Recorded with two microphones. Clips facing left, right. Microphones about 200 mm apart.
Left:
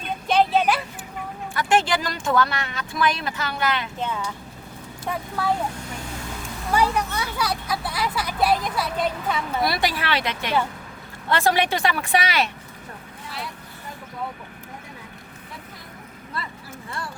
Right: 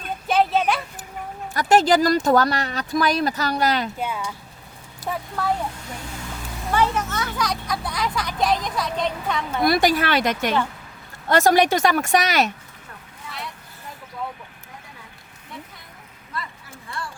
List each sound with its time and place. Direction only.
0.3 s a sound: centre (ahead or behind)
1.5 s speech: 40° right (ahead or behind)
3.9 s speech: 10° right (ahead or behind)
6.7 s speech: 10° left (ahead or behind)
9.6 s a woman's voice: 45° right (ahead or behind)